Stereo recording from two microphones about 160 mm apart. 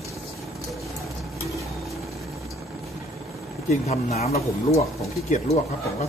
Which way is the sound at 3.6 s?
40° left (ahead or behind).